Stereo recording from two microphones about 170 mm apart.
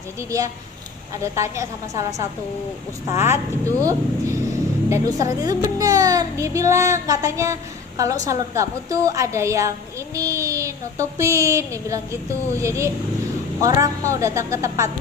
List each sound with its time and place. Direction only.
0.2 s a woman's voice: 20° right (ahead or behind)
3.8 s a woman's voice: 20° right (ahead or behind)
10.2 s a sound: 20° right (ahead or behind)